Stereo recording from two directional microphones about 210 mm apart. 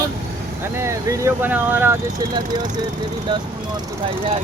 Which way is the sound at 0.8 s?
15° right (ahead or behind).